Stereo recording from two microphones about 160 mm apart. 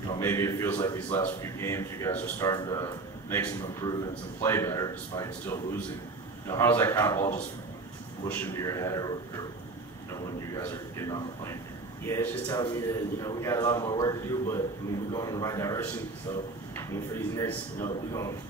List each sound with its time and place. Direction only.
0.2 s a man's voice: 15° left (ahead or behind)
10.6 s a man's voice: 15° left (ahead or behind)